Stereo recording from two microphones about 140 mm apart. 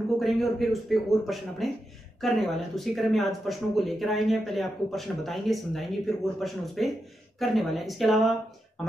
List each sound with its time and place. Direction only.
0.2 s speech: centre (ahead or behind)